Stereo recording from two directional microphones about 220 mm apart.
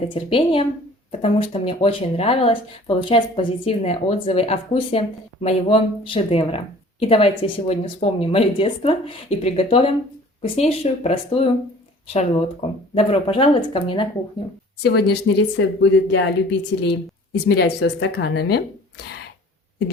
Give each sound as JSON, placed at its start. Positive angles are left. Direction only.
{"t": 0.1, "sound": "speech", "side_deg": 25}
{"t": 14.8, "sound": "a woman's voice", "side_deg": 45}